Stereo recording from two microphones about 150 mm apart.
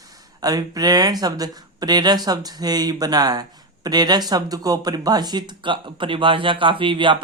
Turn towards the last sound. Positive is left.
turn(degrees=-35)  # may be behind; listen again after turning